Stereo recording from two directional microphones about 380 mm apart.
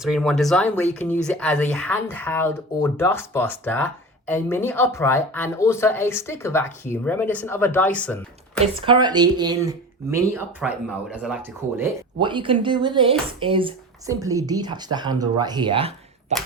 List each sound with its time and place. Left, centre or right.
0.0 s speech: centre
8.6 s speech: centre